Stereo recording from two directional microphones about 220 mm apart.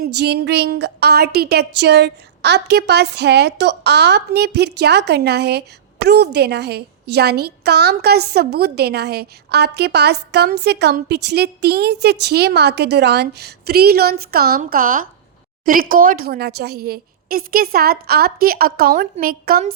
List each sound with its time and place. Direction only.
0.0 s a woman's voice: 50° right (ahead or behind)